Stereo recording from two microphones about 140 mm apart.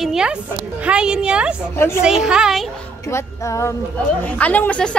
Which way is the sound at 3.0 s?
20° left (ahead or behind).